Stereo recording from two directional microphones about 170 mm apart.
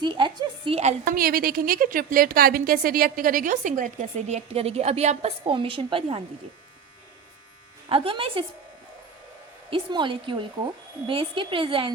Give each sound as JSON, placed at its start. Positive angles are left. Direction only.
{"t": 0.0, "sound": "a woman's voice", "side_deg": -25}
{"t": 1.0, "sound": "a woman's voice", "side_deg": -60}
{"t": 7.9, "sound": "speech", "side_deg": -35}
{"t": 9.6, "sound": "speech", "side_deg": -30}